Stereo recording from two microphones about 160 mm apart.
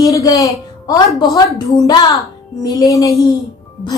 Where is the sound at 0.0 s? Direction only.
20° left (ahead or behind).